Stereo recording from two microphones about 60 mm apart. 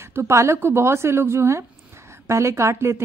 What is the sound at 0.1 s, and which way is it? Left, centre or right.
A woman's voice, right.